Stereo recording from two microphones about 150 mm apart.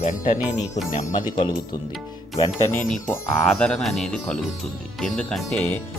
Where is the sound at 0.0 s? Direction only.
55° left (ahead or behind).